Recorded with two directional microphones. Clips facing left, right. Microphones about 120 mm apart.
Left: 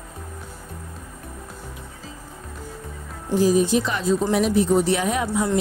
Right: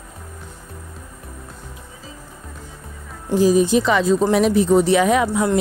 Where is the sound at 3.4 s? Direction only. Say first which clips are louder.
Right 4 dB; 90° right.